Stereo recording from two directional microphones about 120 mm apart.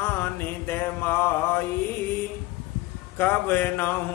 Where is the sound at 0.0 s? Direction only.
15° left (ahead or behind).